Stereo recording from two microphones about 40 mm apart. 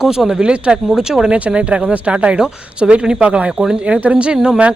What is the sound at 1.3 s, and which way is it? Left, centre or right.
Speech, right.